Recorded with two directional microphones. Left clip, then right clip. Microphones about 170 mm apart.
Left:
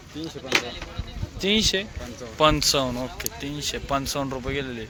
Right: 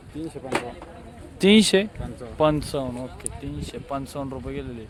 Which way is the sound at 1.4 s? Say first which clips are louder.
Right 4 dB; 60° right (ahead or behind).